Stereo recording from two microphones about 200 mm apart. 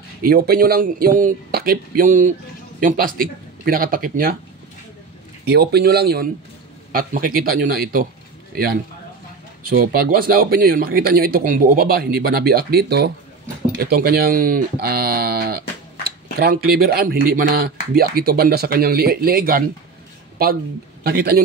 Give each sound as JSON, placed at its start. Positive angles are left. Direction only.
{"t": 0.2, "sound": "speech", "side_deg": -45}
{"t": 5.5, "sound": "speech", "side_deg": -55}
{"t": 9.6, "sound": "speech", "side_deg": -45}
{"t": 21.0, "sound": "a man's voice", "side_deg": -50}